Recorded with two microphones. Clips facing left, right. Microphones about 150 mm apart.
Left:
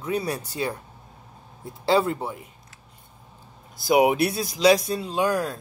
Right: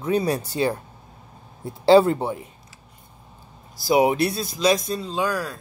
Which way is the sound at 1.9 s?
30° right (ahead or behind).